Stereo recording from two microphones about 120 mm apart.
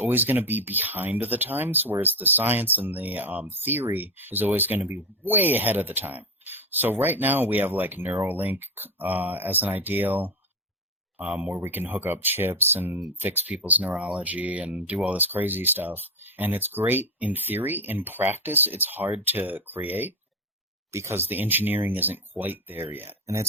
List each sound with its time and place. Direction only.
0.0 s speech: 15° right (ahead or behind)